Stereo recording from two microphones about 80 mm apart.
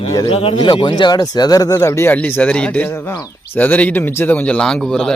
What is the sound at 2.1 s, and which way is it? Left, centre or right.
Speech, left.